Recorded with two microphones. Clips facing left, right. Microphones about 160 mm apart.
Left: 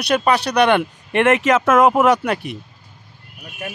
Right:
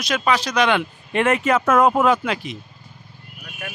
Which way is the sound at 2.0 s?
60° left (ahead or behind).